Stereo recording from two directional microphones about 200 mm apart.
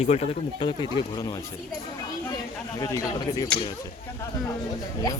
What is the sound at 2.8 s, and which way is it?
Speech, 15° left (ahead or behind).